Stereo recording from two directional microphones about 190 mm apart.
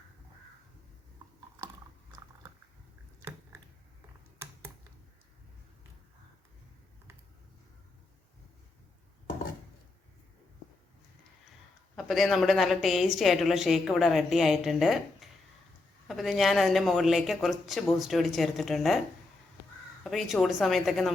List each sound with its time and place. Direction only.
11.9 s a woman's voice: centre (ahead or behind)
20.1 s a woman's voice: centre (ahead or behind)